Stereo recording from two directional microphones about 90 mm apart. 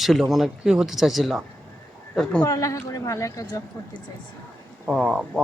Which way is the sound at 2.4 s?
40° left (ahead or behind).